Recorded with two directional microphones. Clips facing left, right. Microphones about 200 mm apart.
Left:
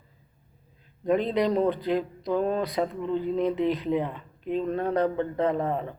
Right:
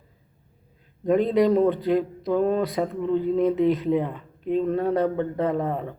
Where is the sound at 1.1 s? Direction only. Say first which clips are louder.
Right 4 dB; 45° right (ahead or behind).